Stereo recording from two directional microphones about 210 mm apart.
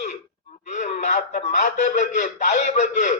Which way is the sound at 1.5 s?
35° left (ahead or behind).